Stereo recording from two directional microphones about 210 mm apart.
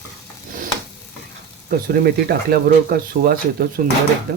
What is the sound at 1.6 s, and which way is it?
Speech, 45° right (ahead or behind).